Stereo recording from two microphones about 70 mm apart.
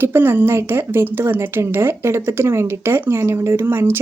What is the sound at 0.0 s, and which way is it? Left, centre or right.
Speech, right.